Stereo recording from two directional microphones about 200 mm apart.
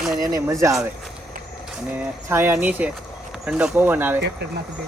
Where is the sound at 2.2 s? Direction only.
10° right (ahead or behind).